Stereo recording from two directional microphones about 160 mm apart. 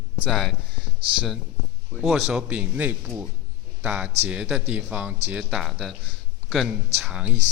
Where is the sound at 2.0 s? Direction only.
5° right (ahead or behind).